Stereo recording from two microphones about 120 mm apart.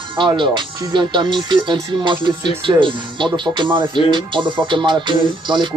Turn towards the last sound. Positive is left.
turn(degrees=-40)  # may be behind; listen again after turning